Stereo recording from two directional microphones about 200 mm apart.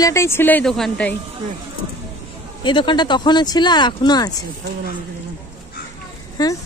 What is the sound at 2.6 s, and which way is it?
Speech, 25° left (ahead or behind).